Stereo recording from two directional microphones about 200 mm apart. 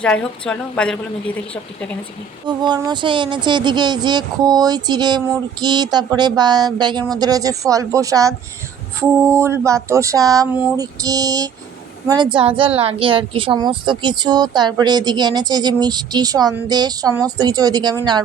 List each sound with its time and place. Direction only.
0.0 s a woman's voice: 5° left (ahead or behind)
2.5 s a woman's voice: 20° right (ahead or behind)
9.3 s female singing: 15° right (ahead or behind)
12.0 s a woman's voice: 20° right (ahead or behind)